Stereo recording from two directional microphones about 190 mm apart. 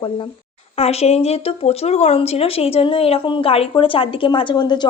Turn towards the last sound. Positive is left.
turn(degrees=25)  # may be behind; listen again after turning